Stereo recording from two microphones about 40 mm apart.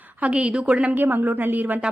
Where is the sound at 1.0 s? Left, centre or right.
Right.